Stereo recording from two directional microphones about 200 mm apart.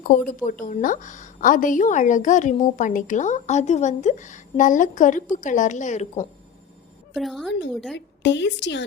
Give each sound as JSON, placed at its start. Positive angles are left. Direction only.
{"t": 0.0, "sound": "a woman's voice", "side_deg": 45}
{"t": 7.1, "sound": "a woman's voice", "side_deg": 0}
{"t": 7.9, "sound": "a woman's voice", "side_deg": 60}